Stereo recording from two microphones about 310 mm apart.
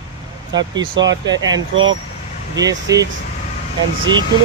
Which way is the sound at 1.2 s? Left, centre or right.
Centre.